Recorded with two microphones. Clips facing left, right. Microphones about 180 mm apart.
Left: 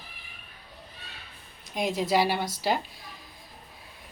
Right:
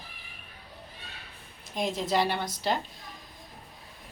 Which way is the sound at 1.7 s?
Centre (ahead or behind).